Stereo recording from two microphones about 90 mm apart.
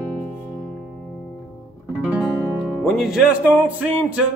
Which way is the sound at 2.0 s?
15° right (ahead or behind).